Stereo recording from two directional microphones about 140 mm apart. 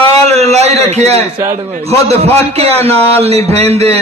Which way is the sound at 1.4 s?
15° right (ahead or behind).